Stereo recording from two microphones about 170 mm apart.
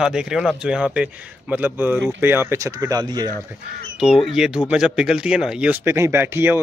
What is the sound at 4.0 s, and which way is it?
Speech, 5° right (ahead or behind).